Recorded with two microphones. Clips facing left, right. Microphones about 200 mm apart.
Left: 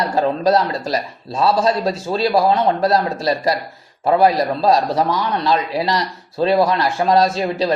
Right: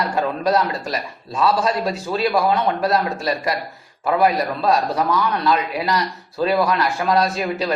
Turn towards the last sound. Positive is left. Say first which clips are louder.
# left 3 dB
turn(degrees=30)  # may be behind; listen again after turning